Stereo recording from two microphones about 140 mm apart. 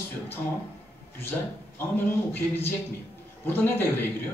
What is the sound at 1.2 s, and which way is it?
Speech, 15° left (ahead or behind).